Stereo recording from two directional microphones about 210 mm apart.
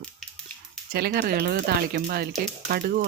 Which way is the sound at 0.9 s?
50° right (ahead or behind).